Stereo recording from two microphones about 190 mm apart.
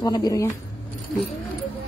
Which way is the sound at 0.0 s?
20° left (ahead or behind).